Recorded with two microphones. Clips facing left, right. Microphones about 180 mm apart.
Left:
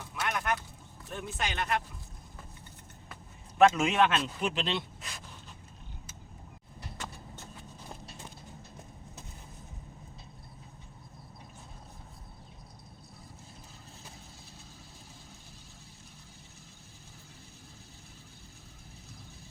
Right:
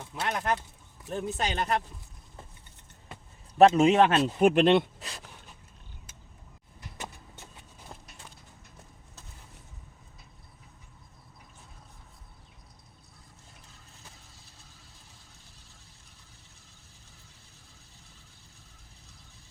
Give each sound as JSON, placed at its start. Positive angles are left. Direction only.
{"t": 0.0, "sound": "bird", "side_deg": -30}
{"t": 1.1, "sound": "speech", "side_deg": -35}
{"t": 3.6, "sound": "speech", "side_deg": -30}
{"t": 4.4, "sound": "speech", "side_deg": -55}
{"t": 4.9, "sound": "pant", "side_deg": -35}
{"t": 6.9, "sound": "vehicle", "side_deg": -20}